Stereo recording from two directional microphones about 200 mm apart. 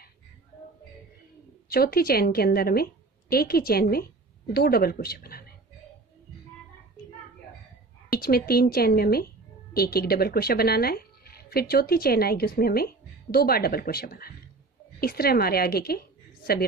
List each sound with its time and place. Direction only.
1.7 s a woman's voice: 50° left (ahead or behind)
8.1 s a woman's voice: 50° left (ahead or behind)